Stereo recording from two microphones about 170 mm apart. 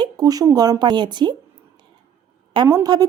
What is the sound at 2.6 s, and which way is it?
Speech, 15° right (ahead or behind).